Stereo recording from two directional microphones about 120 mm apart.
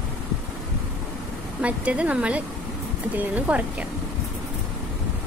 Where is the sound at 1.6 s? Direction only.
10° right (ahead or behind).